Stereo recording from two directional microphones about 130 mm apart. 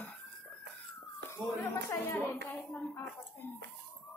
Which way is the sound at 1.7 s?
20° left (ahead or behind).